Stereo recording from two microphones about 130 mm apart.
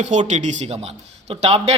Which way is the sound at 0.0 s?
65° right (ahead or behind).